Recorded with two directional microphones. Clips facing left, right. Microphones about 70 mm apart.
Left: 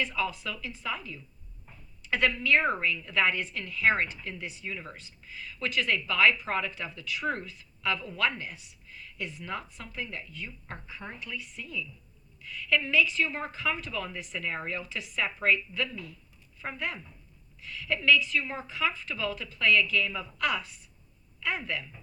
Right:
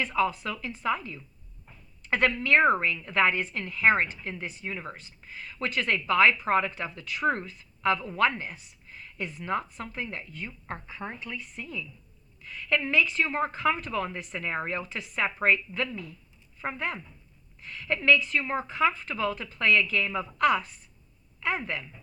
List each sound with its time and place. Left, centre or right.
0.0 s a woman's voice: right
2.0 s a sound: right
2.4 s a woman's voice: right